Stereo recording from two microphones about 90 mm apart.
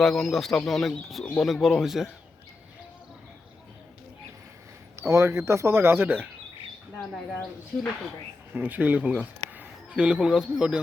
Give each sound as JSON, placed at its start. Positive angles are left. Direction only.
{"t": 0.0, "sound": "speech", "side_deg": 5}
{"t": 4.9, "sound": "speech", "side_deg": -30}
{"t": 8.5, "sound": "speech", "side_deg": -20}